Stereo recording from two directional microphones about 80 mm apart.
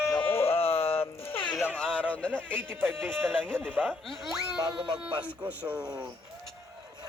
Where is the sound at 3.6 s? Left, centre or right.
Right.